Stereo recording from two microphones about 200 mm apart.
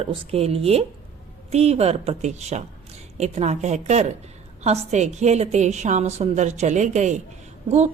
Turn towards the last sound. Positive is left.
turn(degrees=-35)  # may be behind; listen again after turning